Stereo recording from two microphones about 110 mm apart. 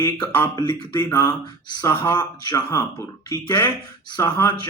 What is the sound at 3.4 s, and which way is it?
Speech, 20° left (ahead or behind).